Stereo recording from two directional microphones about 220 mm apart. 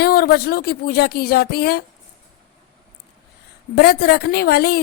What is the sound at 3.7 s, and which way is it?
Speech, 45° left (ahead or behind).